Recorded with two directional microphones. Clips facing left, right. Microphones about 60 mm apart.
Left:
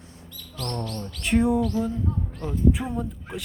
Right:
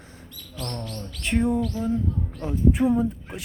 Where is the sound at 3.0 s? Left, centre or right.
Centre.